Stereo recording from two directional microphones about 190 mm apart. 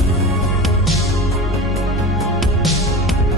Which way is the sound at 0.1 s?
Centre (ahead or behind).